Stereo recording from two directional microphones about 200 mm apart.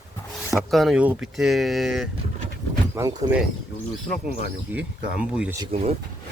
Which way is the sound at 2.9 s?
15° right (ahead or behind).